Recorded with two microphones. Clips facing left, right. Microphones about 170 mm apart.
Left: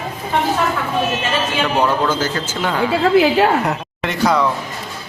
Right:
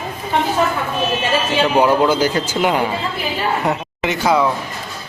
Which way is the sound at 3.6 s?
Centre (ahead or behind).